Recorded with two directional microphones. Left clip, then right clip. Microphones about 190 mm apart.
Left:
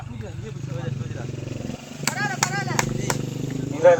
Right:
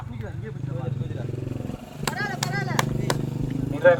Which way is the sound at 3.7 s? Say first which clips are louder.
Left 2 dB; 45° left (ahead or behind).